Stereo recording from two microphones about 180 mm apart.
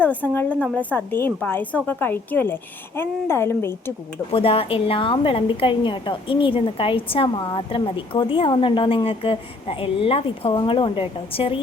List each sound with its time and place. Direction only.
0.0 s a woman's voice: 10° left (ahead or behind)
4.3 s a woman's voice: 30° left (ahead or behind)